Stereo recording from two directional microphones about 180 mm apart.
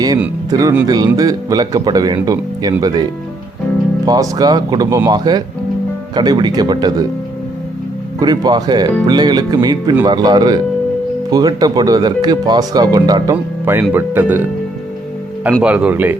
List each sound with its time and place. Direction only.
0.5 s speech: 20° right (ahead or behind)
8.2 s speech: 25° right (ahead or behind)
13.3 s speech: 10° right (ahead or behind)
15.6 s speech: 5° right (ahead or behind)